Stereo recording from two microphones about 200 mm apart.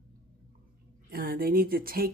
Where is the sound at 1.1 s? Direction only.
45° right (ahead or behind).